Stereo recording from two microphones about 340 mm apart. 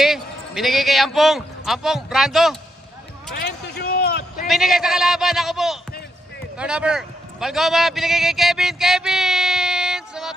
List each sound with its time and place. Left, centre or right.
0.0 s a man's voice: centre
3.3 s a sound: left
4.5 s a man's voice: centre